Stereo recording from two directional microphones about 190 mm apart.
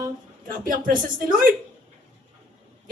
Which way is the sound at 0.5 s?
45° right (ahead or behind).